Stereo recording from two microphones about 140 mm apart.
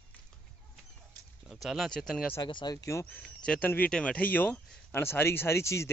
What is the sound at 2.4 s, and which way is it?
Speech, 30° left (ahead or behind).